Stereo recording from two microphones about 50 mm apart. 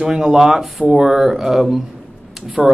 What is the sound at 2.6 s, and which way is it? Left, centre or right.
Speech, centre.